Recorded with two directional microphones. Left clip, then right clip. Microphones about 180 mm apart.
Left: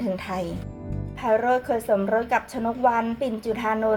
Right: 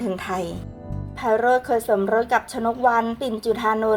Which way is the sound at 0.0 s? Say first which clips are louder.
Right 2 dB; 25° right (ahead or behind).